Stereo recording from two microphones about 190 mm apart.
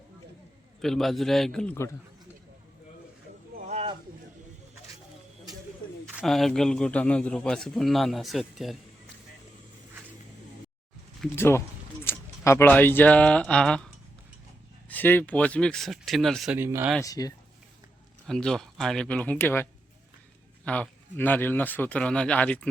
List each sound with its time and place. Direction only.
0.8 s a man's voice: centre (ahead or behind)
3.7 s a sound: 30° right (ahead or behind)
6.1 s a man's voice: centre (ahead or behind)
11.3 s a man's voice: 15° left (ahead or behind)
16.6 s speech: 15° right (ahead or behind)
17.0 s speech: 20° left (ahead or behind)
18.3 s a man's voice: 5° left (ahead or behind)
20.7 s speech: 5° left (ahead or behind)